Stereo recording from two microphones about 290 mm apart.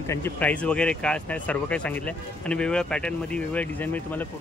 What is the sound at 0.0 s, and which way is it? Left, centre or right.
Speech, centre.